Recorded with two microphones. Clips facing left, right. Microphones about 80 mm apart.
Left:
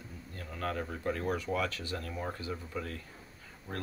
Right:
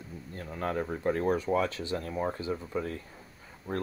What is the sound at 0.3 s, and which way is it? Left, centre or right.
Speech, right.